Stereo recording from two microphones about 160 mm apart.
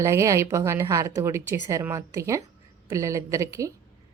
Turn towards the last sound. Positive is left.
turn(degrees=-20)  # may be behind; listen again after turning